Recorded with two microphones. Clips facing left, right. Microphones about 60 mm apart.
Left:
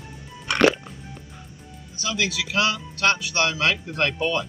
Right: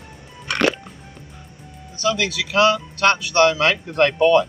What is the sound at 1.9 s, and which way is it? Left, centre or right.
Speech, right.